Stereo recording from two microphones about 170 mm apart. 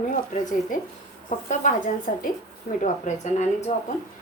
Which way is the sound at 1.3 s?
45° left (ahead or behind).